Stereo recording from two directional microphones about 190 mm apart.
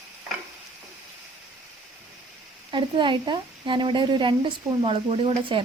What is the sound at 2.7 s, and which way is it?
A woman's voice, 25° right (ahead or behind).